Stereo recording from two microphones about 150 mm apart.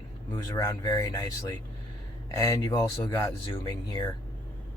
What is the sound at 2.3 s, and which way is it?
Speech, 20° left (ahead or behind).